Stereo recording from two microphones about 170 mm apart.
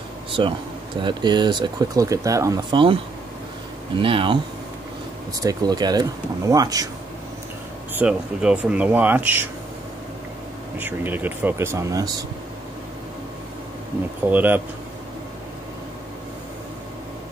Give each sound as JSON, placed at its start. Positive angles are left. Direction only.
{"t": 1.0, "sound": "speech", "side_deg": -25}
{"t": 4.0, "sound": "speech", "side_deg": -30}
{"t": 5.4, "sound": "speech", "side_deg": -20}
{"t": 8.0, "sound": "speech", "side_deg": -5}
{"t": 10.8, "sound": "speech", "side_deg": -10}
{"t": 14.2, "sound": "speech", "side_deg": -10}